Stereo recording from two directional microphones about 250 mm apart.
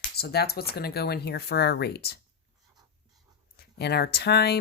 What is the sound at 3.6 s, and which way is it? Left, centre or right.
Speech, left.